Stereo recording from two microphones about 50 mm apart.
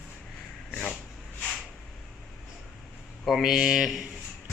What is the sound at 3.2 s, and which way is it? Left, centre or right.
Speech, centre.